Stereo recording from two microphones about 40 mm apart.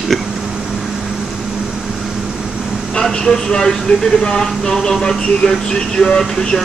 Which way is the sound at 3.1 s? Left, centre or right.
Centre.